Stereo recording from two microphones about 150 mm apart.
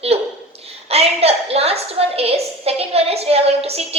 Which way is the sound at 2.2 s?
40° right (ahead or behind).